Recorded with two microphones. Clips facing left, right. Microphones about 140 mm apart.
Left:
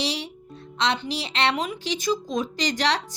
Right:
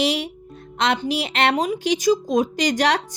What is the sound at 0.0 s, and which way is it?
Music, 50° right (ahead or behind).